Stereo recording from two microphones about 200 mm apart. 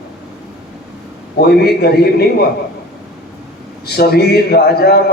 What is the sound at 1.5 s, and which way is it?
A man's voice, 50° left (ahead or behind).